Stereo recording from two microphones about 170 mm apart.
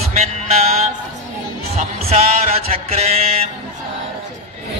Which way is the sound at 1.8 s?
40° right (ahead or behind).